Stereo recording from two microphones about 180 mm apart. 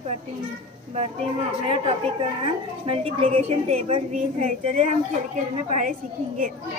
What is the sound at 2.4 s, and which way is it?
A woman's voice, 30° right (ahead or behind).